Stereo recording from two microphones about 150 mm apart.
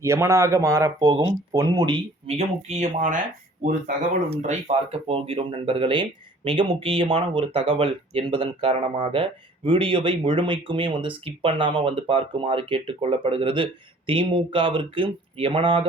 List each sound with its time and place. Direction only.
0.0 s speech: 20° right (ahead or behind)
2.2 s speech: 45° right (ahead or behind)